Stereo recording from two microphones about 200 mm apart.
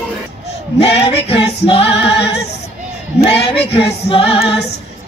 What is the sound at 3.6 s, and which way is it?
Music, 55° left (ahead or behind).